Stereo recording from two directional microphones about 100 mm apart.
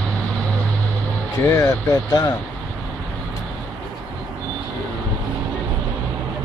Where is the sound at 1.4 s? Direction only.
35° left (ahead or behind).